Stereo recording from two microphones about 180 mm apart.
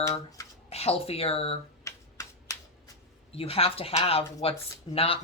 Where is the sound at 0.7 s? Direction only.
35° left (ahead or behind).